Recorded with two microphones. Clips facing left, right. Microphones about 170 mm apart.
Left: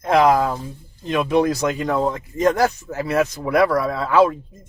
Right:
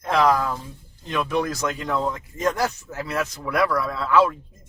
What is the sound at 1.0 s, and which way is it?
Speech, 20° left (ahead or behind).